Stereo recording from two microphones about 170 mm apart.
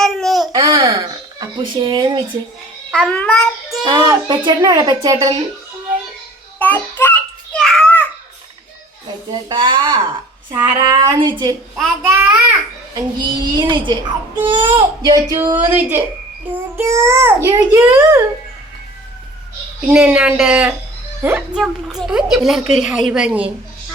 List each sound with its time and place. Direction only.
0.0 s babbling: centre (ahead or behind)
0.5 s a sound: 25° right (ahead or behind)
2.9 s a woman's voice: 5° left (ahead or behind)
3.8 s a child's voice: 25° right (ahead or behind)
6.6 s child singing: 10° left (ahead or behind)
7.5 s a sound: centre (ahead or behind)
9.3 s a child's voice: 30° right (ahead or behind)
12.0 s a child's voice: 15° right (ahead or behind)
12.9 s a child's voice: 25° right (ahead or behind)
19.9 s a child's voice: 5° right (ahead or behind)